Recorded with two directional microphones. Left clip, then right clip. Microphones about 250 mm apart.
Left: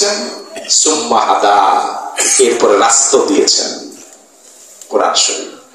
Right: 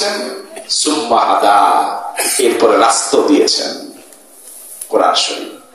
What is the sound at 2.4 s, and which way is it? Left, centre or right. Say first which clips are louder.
A man's voice: even; right.